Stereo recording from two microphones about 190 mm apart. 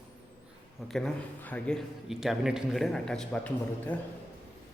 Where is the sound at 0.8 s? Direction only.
Centre (ahead or behind).